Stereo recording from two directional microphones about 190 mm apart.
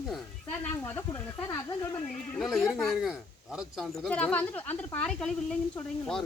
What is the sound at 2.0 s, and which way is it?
Speech, 5° left (ahead or behind).